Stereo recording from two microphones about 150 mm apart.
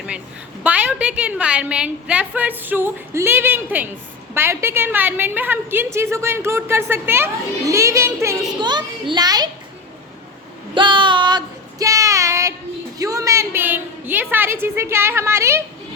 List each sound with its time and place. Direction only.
0.6 s a woman's voice: 10° right (ahead or behind)
8.6 s a child's voice: 30° right (ahead or behind)
10.8 s child singing: 30° right (ahead or behind)
13.0 s a woman's voice: 20° right (ahead or behind)